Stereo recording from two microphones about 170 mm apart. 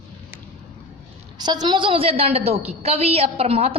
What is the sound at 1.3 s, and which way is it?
A woman's voice, 25° right (ahead or behind).